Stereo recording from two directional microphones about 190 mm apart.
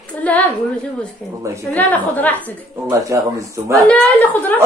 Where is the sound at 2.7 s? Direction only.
15° right (ahead or behind).